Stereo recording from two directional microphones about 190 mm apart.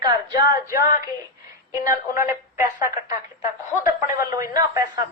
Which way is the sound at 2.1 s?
15° right (ahead or behind).